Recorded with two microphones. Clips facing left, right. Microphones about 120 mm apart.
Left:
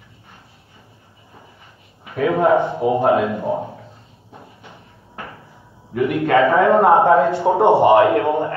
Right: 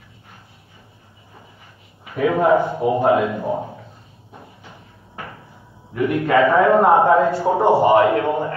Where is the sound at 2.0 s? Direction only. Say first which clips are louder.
Left 1 dB; 25° left (ahead or behind).